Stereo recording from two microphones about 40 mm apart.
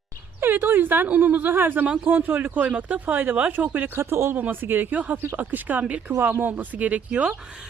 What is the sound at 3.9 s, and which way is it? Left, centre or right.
Speech, right.